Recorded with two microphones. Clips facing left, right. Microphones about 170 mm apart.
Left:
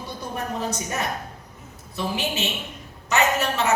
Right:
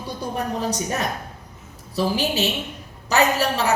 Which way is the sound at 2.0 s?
35° right (ahead or behind).